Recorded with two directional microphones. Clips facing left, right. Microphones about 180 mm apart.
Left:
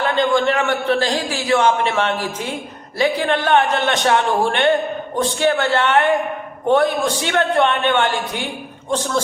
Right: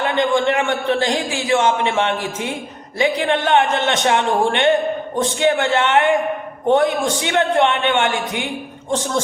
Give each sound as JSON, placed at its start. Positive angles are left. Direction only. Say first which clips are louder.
{"t": 0.0, "sound": "a man's voice", "louder": "even", "side_deg": -20}